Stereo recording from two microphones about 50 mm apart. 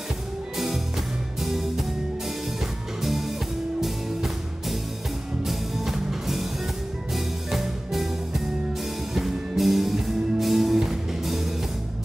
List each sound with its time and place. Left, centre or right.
1.4 s music: centre
3.0 s music: centre